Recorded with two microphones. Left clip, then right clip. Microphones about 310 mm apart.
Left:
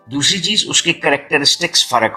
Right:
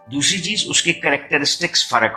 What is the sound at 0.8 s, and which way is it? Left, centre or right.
Speech, left.